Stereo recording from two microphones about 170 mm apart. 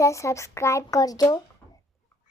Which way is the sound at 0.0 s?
20° left (ahead or behind).